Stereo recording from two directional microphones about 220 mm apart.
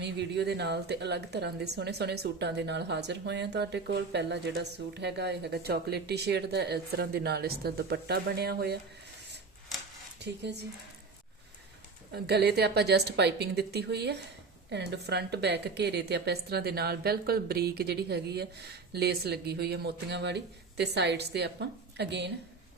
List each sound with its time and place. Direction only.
0.0 s a woman's voice: 50° right (ahead or behind)
10.2 s a woman's voice: 50° right (ahead or behind)
12.1 s a woman's voice: 50° right (ahead or behind)